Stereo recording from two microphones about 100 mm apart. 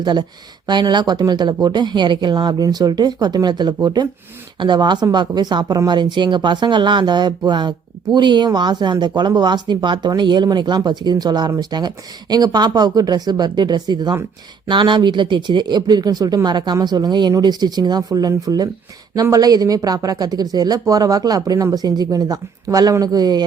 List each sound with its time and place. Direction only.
0.0 s speech: 45° right (ahead or behind)